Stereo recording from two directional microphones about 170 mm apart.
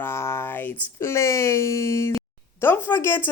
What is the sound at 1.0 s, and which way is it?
A woman's voice, 15° left (ahead or behind).